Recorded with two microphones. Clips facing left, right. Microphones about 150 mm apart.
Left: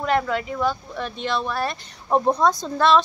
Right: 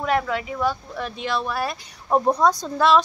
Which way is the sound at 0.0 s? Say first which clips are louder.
Left 1 dB; 5° right (ahead or behind).